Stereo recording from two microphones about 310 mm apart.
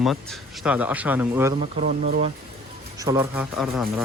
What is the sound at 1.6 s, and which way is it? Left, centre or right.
Speech, centre.